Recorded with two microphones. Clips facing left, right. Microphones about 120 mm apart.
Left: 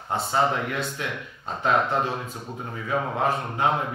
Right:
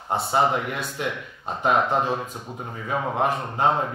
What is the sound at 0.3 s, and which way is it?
Speech, 10° right (ahead or behind).